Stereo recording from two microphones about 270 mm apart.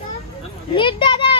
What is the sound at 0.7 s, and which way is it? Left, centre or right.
Speech, centre.